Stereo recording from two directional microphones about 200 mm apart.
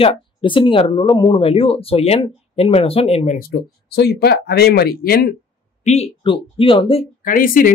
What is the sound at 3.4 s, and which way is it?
Speech, 50° left (ahead or behind).